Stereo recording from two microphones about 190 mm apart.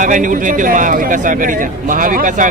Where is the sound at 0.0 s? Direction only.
45° right (ahead or behind).